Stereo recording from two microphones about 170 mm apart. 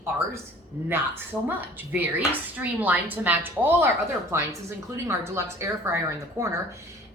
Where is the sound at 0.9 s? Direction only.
10° right (ahead or behind).